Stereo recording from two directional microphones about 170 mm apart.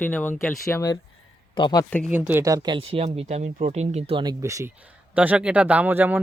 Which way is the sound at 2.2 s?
15° right (ahead or behind).